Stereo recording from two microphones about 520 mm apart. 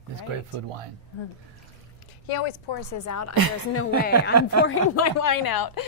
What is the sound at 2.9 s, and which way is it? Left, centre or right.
Speech, left.